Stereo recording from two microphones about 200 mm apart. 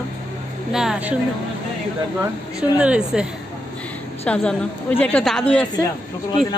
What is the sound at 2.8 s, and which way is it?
Speech, 5° right (ahead or behind).